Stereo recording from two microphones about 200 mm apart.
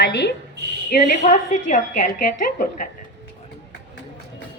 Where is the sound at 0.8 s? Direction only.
45° left (ahead or behind).